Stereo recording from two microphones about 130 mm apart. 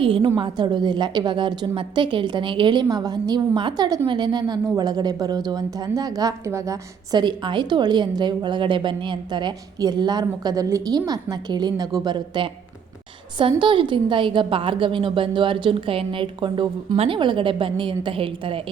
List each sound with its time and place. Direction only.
0.0 s a woman's voice: 45° right (ahead or behind); by 7.2 s 25° right (ahead or behind)
7.2 s a woman's voice: 35° right (ahead or behind)
13.6 s a woman's voice: 40° right (ahead or behind)